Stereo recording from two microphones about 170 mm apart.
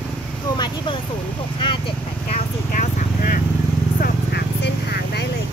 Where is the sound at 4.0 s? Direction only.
70° left (ahead or behind).